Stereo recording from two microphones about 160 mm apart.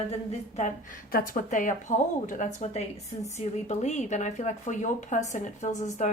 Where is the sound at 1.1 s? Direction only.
55° left (ahead or behind).